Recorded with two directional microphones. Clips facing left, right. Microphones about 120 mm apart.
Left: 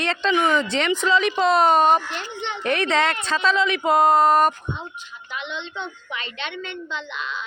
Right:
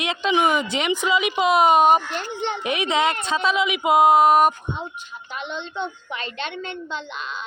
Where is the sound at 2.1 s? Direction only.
45° right (ahead or behind).